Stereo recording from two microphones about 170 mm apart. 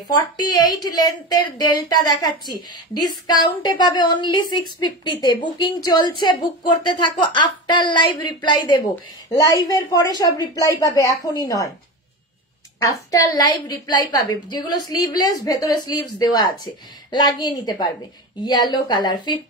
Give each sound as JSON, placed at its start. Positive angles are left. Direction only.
{"t": 0.1, "sound": "a woman's voice", "side_deg": 20}
{"t": 12.7, "sound": "a woman's voice", "side_deg": 20}